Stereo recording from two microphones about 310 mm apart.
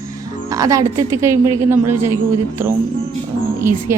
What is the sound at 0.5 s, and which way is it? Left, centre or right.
A woman's voice, centre.